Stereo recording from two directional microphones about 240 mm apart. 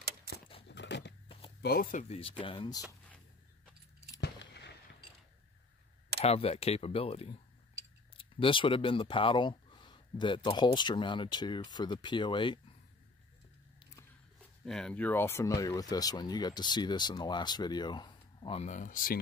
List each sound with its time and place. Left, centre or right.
0.3 s a sound: right
0.7 s biting: left
1.6 s speech: left; by 2.8 s centre
4.2 s a sound: left
6.2 s speech: left
14.6 s speech: centre; by 19.1 s left